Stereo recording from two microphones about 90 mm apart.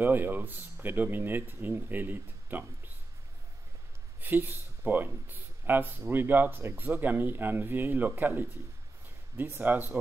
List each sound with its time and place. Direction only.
0.0 s speech: 20° right (ahead or behind)
4.2 s speech: 20° right (ahead or behind)